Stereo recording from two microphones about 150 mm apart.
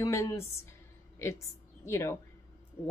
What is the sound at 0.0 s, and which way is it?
Speech, 20° left (ahead or behind).